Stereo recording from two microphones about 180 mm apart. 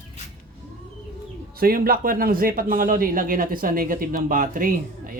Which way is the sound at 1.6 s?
55° right (ahead or behind).